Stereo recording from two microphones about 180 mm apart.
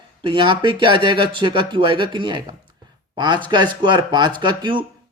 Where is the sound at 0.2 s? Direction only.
30° right (ahead or behind).